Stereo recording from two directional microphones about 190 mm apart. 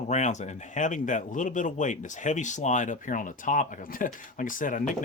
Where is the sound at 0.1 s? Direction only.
40° left (ahead or behind).